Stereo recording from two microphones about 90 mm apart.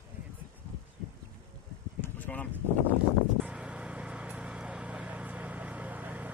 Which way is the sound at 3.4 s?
15° right (ahead or behind).